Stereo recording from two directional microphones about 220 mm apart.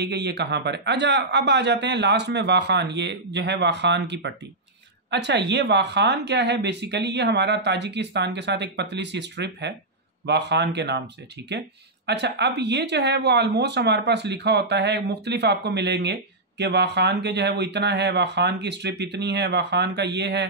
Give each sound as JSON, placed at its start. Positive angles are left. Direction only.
{"t": 0.0, "sound": "speech", "side_deg": -50}
{"t": 12.1, "sound": "speech", "side_deg": -50}